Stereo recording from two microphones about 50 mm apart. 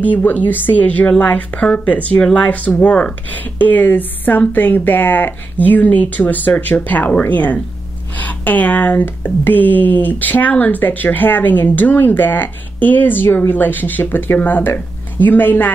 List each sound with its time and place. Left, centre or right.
0.0 s speech: left
3.5 s speech: left